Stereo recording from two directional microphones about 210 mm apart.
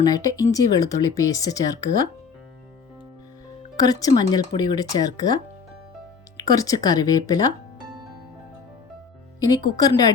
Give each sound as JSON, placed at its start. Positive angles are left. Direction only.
{"t": 0.0, "sound": "speech", "side_deg": 15}
{"t": 3.8, "sound": "speech", "side_deg": 15}
{"t": 9.6, "sound": "speech", "side_deg": 20}